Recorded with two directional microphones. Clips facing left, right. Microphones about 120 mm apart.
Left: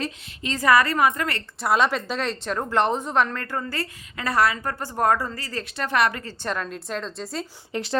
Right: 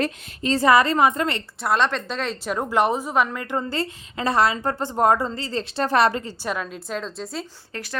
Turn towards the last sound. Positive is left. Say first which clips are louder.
# left 6 dB
turn(degrees=25)  # may be behind; listen again after turning